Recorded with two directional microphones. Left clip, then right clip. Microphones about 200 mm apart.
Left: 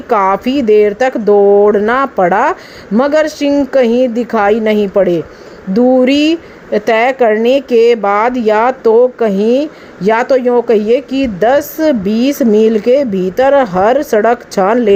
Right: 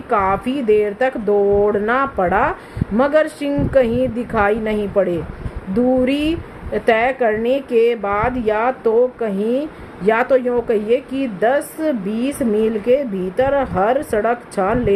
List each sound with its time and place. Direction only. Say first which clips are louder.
0.1 s a woman's voice: left 6 dB; 35° left (ahead or behind)